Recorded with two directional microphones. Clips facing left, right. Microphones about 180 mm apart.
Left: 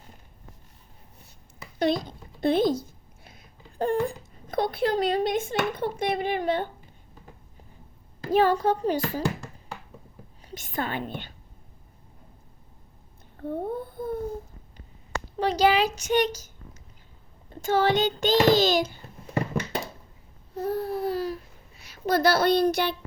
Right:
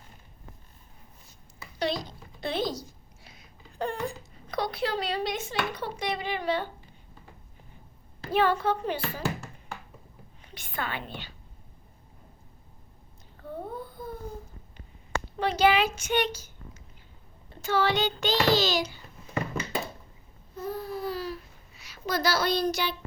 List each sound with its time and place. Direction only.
1.8 s a sound: 50° left (ahead or behind)
5.7 s a child's voice: 55° left (ahead or behind)
8.3 s speech: 40° left (ahead or behind)
10.4 s a sound: 45° left (ahead or behind)
10.8 s a child's voice: 45° left (ahead or behind)
13.4 s babbling: 55° left (ahead or behind)
15.4 s speech: 35° left (ahead or behind)
17.5 s a child's voice: 45° left (ahead or behind)
20.6 s a sound: 65° left (ahead or behind); by 21.4 s 50° left (ahead or behind)
22.0 s a child's voice: 55° left (ahead or behind)